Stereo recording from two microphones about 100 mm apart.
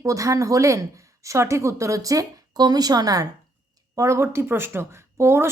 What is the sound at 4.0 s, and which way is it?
Speech, 30° right (ahead or behind).